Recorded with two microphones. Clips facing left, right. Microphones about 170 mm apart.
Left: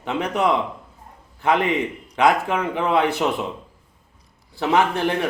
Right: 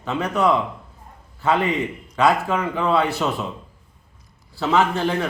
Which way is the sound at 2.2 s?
15° left (ahead or behind).